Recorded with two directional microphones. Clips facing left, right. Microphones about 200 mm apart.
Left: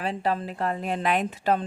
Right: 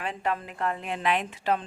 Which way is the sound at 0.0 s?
35° left (ahead or behind).